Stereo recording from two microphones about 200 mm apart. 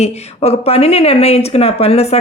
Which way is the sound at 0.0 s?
30° left (ahead or behind).